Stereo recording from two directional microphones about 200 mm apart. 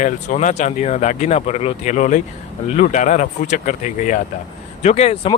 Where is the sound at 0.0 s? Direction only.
40° left (ahead or behind).